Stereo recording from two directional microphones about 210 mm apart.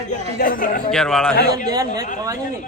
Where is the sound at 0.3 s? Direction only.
40° left (ahead or behind).